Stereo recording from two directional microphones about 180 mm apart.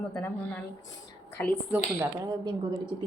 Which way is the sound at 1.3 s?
10° left (ahead or behind).